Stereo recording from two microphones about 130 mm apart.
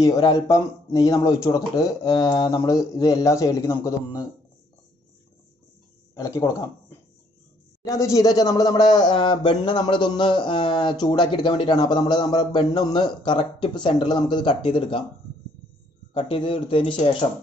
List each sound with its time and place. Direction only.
0.0 s speech: 30° left (ahead or behind)
6.1 s speech: 25° left (ahead or behind)
7.8 s speech: 25° left (ahead or behind); by 15.0 s 40° left (ahead or behind)
16.1 s a man's voice: 45° left (ahead or behind)